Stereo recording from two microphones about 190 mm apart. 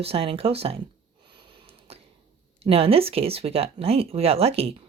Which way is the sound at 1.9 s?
30° right (ahead or behind).